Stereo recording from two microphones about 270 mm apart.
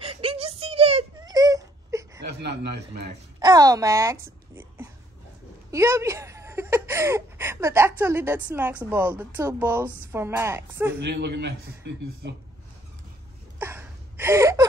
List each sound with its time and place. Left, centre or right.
0.0 s wail: centre
3.3 s speech: centre
11.0 s a man's voice: right
13.6 s a sound: centre